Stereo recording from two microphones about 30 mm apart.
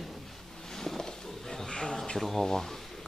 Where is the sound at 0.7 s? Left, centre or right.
Centre.